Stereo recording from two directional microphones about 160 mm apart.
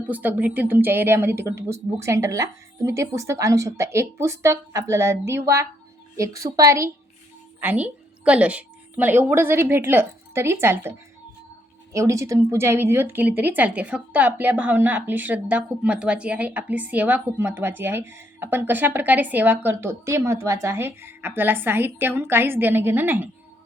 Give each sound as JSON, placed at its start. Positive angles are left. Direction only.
{"t": 0.1, "sound": "a woman's voice", "side_deg": -10}
{"t": 11.9, "sound": "speech", "side_deg": -20}